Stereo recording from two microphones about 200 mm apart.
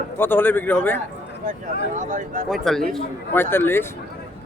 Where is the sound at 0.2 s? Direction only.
10° left (ahead or behind).